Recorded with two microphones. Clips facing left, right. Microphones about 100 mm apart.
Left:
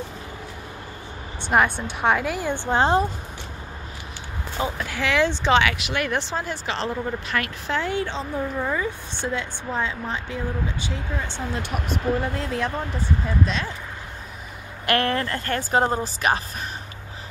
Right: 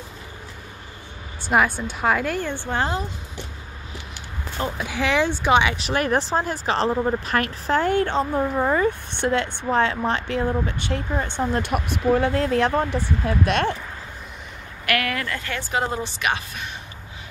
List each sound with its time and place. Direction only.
1.5 s a woman's voice: centre (ahead or behind)
2.5 s a woman's voice: 20° left (ahead or behind)
4.7 s speech: 15° right (ahead or behind)
5.8 s speech: 35° right (ahead or behind); by 13.7 s 60° right (ahead or behind)
14.9 s speech: 30° left (ahead or behind)